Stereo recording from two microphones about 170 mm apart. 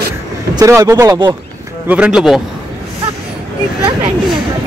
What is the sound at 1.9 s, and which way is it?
Speech, 5° right (ahead or behind).